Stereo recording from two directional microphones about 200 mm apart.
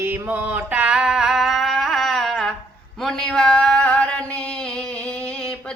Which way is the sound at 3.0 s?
5° left (ahead or behind).